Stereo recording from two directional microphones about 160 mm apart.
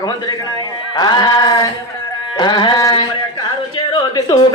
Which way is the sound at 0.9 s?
25° left (ahead or behind).